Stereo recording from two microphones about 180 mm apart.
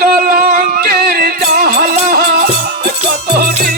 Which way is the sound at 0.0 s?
50° right (ahead or behind).